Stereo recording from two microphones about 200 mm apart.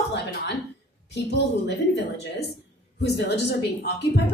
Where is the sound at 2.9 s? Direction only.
55° left (ahead or behind).